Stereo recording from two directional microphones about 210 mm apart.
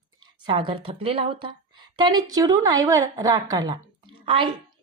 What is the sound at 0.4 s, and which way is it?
A woman's voice, 25° right (ahead or behind).